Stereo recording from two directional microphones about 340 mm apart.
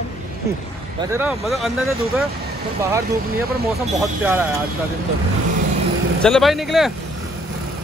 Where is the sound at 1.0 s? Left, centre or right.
Centre.